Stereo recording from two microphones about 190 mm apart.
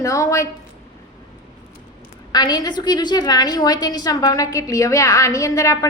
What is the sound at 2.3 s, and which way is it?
A woman's voice, 20° left (ahead or behind).